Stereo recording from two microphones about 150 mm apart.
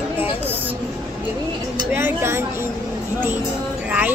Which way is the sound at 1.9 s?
15° right (ahead or behind).